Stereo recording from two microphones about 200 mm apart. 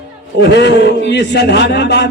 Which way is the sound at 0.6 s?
60° left (ahead or behind).